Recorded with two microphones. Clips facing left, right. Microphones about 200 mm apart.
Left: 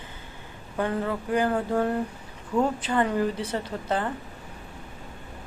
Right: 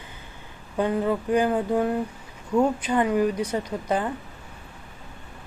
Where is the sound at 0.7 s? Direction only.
15° right (ahead or behind).